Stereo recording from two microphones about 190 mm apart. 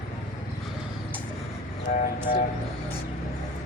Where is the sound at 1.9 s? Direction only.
50° left (ahead or behind).